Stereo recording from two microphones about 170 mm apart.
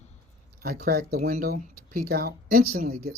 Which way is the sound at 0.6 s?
60° right (ahead or behind).